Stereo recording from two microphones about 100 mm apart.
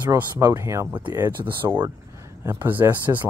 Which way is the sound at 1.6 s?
40° right (ahead or behind).